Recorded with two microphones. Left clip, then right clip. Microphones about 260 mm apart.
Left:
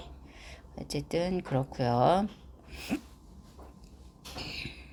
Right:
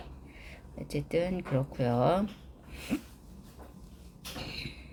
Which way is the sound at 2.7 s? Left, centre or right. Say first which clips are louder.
Even; centre.